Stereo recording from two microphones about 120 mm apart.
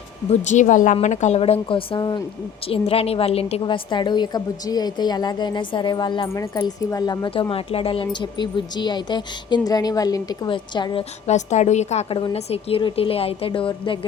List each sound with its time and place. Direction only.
0.3 s speech: 85° left
1.0 s speech: 80° left
1.4 s a woman's voice: 50° left (ahead or behind)
2.6 s a woman's voice: 55° left (ahead or behind)
3.6 s a woman's voice: 40° left (ahead or behind)
6.2 s speech: 25° left (ahead or behind)
7.5 s a woman's voice: 50° left (ahead or behind)
8.0 s a woman's voice: 40° left (ahead or behind)
10.5 s a woman's voice: 40° left (ahead or behind)
11.3 s a woman's voice: 80° left
12.1 s a woman's voice: 50° left (ahead or behind)